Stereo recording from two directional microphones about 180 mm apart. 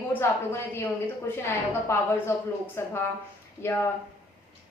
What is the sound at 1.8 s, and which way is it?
A woman's voice, 15° left (ahead or behind).